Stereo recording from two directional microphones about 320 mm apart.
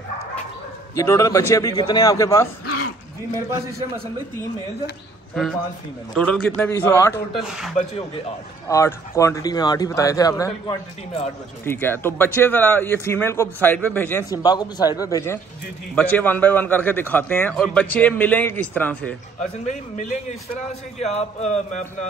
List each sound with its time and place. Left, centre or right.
0.9 s speech: centre
5.3 s a man's voice: centre
8.6 s a man's voice: centre
19.6 s a sound: left